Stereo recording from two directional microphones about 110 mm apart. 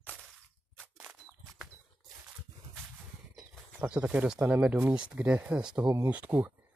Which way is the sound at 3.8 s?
15° right (ahead or behind).